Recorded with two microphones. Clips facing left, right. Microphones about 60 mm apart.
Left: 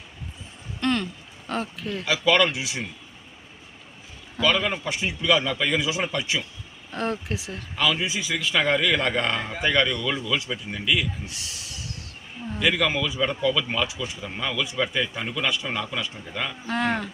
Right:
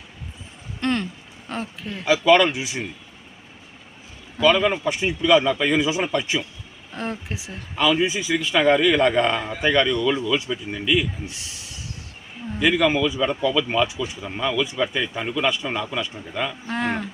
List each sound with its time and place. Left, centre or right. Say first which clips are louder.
0.8 s a sound: right 1 dB; right
1.5 s speech: left 1 dB; centre
4.4 s speech: right 5 dB; centre
6.9 s speech: left 2 dB; centre
8.0 s speech: right 5 dB; right
8.5 s speech: right 5 dB; centre
12.5 s a man's voice: right 4 dB; centre